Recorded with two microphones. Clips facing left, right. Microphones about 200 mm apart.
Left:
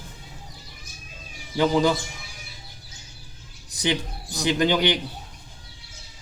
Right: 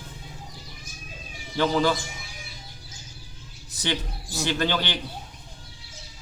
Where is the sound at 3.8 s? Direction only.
15° left (ahead or behind).